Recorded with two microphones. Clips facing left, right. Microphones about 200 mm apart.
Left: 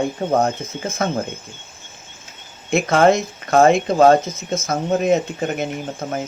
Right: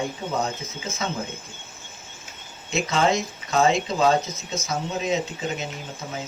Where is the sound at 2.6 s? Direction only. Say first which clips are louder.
Left 8 dB; 55° left (ahead or behind).